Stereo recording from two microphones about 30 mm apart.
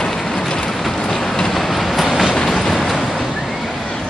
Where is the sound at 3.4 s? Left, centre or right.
Centre.